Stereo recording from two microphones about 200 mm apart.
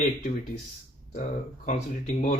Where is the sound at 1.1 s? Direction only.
40° left (ahead or behind).